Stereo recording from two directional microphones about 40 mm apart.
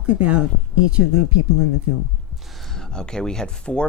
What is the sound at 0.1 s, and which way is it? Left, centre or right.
Speech, right.